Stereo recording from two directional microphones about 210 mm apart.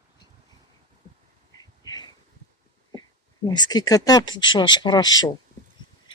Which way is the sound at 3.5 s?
20° left (ahead or behind).